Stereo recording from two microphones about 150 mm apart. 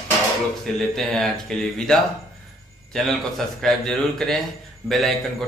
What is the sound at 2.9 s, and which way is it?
A man's voice, centre (ahead or behind).